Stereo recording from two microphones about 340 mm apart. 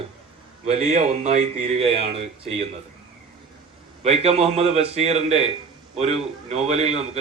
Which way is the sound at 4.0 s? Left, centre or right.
Centre.